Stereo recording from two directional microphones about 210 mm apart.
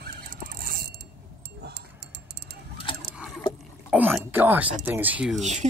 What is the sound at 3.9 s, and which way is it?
Speech, 10° right (ahead or behind).